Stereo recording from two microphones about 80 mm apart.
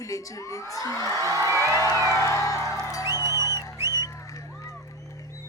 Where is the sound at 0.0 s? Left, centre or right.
Left.